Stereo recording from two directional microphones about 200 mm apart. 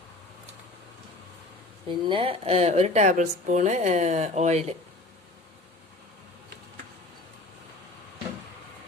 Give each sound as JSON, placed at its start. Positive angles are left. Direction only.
{"t": 1.9, "sound": "speech", "side_deg": -25}